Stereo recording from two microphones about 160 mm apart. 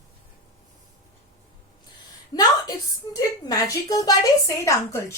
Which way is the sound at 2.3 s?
25° left (ahead or behind).